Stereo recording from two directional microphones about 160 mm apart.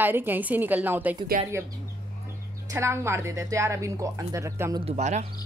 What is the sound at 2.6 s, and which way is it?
Speech, 15° right (ahead or behind).